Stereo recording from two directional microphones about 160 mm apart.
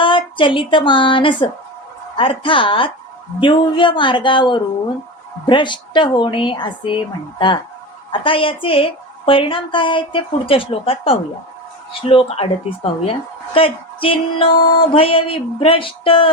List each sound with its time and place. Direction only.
0.0 s a woman's voice: 30° left (ahead or behind)